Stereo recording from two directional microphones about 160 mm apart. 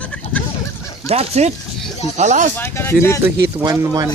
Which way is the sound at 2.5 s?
15° left (ahead or behind).